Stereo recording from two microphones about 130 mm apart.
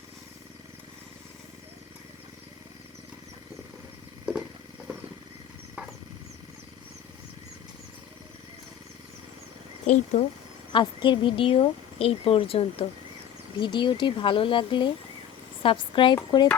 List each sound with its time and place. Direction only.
9.8 s speech: 60° left (ahead or behind)
10.7 s a woman's voice: 35° left (ahead or behind)